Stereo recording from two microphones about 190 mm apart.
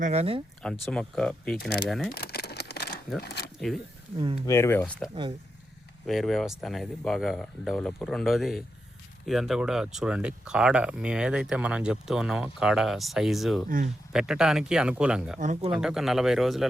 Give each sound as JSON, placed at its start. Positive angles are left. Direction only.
{"t": 0.0, "sound": "speech", "side_deg": -35}
{"t": 0.9, "sound": "speech", "side_deg": 5}
{"t": 2.1, "sound": "a sound", "side_deg": 55}
{"t": 3.2, "sound": "speech", "side_deg": 60}
{"t": 4.4, "sound": "speech", "side_deg": 15}
{"t": 13.7, "sound": "speech", "side_deg": -45}
{"t": 14.1, "sound": "speech", "side_deg": -5}
{"t": 15.4, "sound": "speech", "side_deg": -40}
{"t": 15.7, "sound": "speech", "side_deg": -5}